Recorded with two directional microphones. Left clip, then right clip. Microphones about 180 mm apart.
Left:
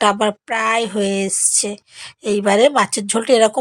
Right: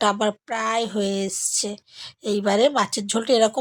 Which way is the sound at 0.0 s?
15° left (ahead or behind).